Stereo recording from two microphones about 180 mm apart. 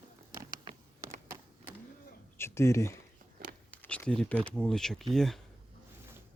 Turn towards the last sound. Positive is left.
turn(degrees=0)  # may be behind; listen again after turning